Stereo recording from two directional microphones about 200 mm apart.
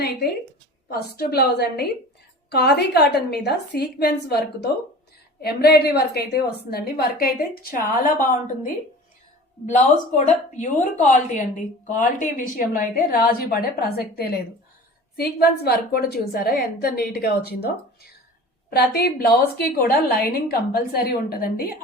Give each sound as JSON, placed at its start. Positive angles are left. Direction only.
{"t": 0.9, "sound": "a woman's voice", "side_deg": 50}
{"t": 10.2, "sound": "a woman's voice", "side_deg": 35}